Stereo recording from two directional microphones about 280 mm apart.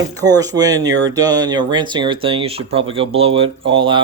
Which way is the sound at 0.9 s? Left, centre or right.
Right.